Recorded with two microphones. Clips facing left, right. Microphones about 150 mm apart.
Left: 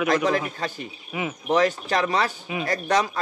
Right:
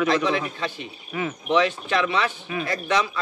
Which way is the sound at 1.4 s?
40° left (ahead or behind).